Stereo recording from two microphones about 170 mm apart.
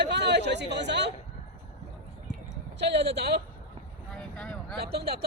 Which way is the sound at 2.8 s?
85° right.